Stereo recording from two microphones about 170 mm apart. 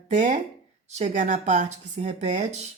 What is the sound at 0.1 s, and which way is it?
A woman's voice, 45° right (ahead or behind).